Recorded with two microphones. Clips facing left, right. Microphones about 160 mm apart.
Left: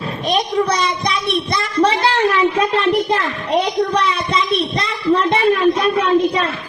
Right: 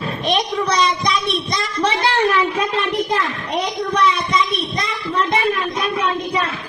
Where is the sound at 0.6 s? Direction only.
55° left (ahead or behind).